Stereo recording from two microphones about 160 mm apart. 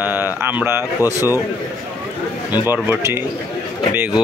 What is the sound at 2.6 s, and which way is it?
Speech, 15° right (ahead or behind).